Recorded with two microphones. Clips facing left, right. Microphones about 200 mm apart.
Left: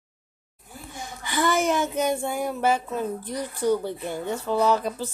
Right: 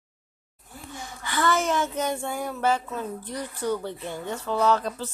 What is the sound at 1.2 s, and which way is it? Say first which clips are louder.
Speech: left 2 dB; 15° left (ahead or behind).